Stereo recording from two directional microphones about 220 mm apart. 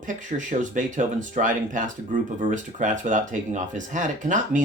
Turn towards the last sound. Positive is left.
turn(degrees=-35)  # may be behind; listen again after turning